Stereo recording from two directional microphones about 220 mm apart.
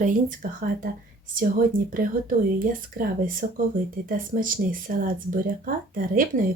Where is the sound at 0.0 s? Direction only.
35° right (ahead or behind).